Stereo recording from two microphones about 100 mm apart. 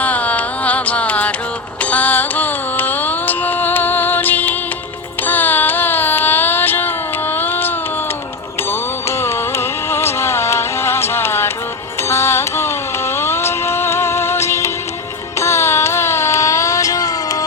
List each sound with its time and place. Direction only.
0.0 s carnatic music: 15° left (ahead or behind)
8.7 s music: 25° left (ahead or behind)
12.0 s carnatic music: 25° left (ahead or behind)